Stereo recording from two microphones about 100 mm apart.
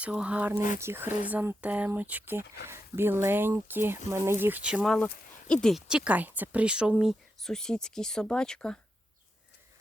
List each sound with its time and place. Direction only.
0.0 s speech: 10° right (ahead or behind)
4.6 s speech: 10° right (ahead or behind)
5.0 s speech: 10° left (ahead or behind)
5.9 s speech: 15° right (ahead or behind); by 8.8 s 10° left (ahead or behind)